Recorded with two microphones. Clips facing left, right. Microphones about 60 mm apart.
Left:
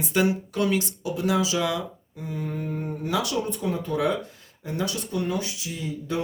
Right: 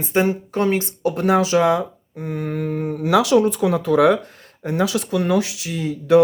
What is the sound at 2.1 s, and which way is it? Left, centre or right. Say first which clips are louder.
Speech: right 7 dB; right.